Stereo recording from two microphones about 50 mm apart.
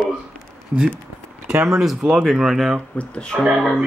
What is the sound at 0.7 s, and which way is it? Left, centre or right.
Speech, right.